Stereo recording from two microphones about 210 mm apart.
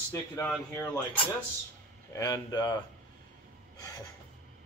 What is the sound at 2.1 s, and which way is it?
Speech, 15° left (ahead or behind).